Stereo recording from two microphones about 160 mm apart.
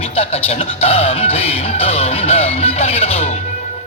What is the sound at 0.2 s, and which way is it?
Speech, 40° left (ahead or behind).